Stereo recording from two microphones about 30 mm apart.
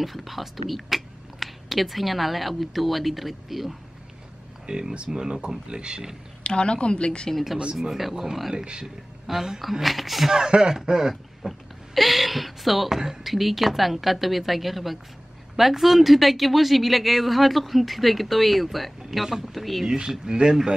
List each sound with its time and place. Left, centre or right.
0.0 s speech: centre
4.7 s speech: right
6.4 s a woman's voice: left
8.0 s a man's voice: centre
10.7 s speech: centre
11.4 s speech: centre
19.9 s speech: right